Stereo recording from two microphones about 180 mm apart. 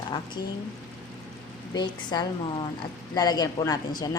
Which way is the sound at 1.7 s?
25° left (ahead or behind).